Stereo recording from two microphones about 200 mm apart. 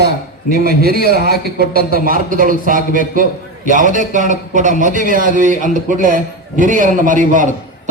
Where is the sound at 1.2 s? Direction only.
50° right (ahead or behind).